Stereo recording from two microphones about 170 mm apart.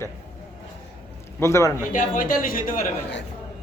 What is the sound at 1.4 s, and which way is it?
Speech, 15° left (ahead or behind).